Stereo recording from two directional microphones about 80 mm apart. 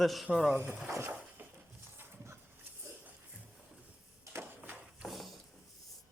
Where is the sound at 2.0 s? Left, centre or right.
Right.